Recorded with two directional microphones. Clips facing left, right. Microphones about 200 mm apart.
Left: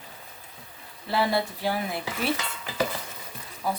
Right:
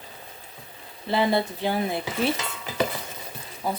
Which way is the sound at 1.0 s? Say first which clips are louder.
Right 3 dB; 20° right (ahead or behind).